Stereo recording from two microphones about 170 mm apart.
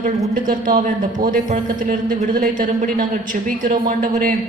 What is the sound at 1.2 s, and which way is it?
Speech, 50° right (ahead or behind).